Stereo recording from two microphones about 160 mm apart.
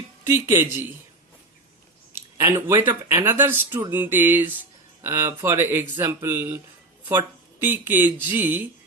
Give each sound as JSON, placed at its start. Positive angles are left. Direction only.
{"t": 0.3, "sound": "speech", "side_deg": -15}
{"t": 2.1, "sound": "speech", "side_deg": -15}